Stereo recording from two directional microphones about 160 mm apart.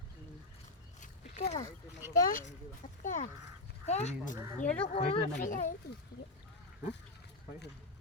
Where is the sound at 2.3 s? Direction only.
55° left (ahead or behind).